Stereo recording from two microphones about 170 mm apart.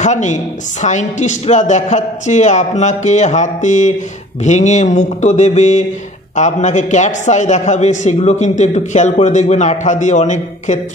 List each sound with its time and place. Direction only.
0.0 s a man's voice: 45° left (ahead or behind)